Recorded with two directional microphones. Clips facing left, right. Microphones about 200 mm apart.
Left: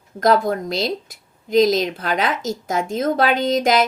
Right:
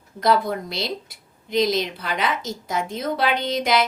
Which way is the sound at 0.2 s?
45° left (ahead or behind).